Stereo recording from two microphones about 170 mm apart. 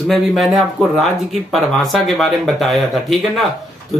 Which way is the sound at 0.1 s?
Centre (ahead or behind).